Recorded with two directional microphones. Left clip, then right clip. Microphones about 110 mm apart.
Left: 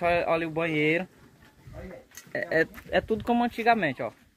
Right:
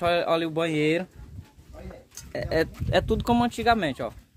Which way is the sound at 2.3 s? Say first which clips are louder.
Even; 30° right (ahead or behind).